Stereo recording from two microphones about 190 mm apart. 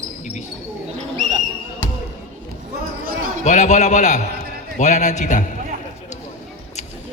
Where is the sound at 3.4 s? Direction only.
40° left (ahead or behind).